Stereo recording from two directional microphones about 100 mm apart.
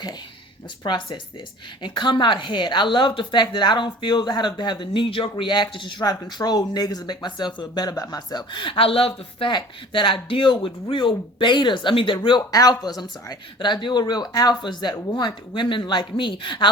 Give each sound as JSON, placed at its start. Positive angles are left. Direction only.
{"t": 0.9, "sound": "a woman's voice", "side_deg": 50}
{"t": 9.5, "sound": "speech", "side_deg": 55}
{"t": 12.5, "sound": "speech", "side_deg": 40}
{"t": 13.0, "sound": "a woman's voice", "side_deg": 50}